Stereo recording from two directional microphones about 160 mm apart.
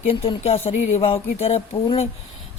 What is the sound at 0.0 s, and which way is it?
Speech, 35° left (ahead or behind).